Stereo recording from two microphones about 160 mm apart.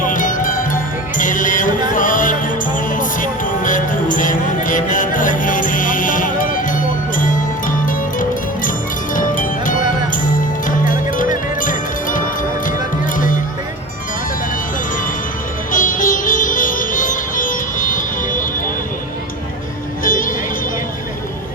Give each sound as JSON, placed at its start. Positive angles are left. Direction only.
{"t": 0.0, "sound": "music", "side_deg": 55}
{"t": 15.7, "sound": "music", "side_deg": 55}
{"t": 20.1, "sound": "music", "side_deg": 55}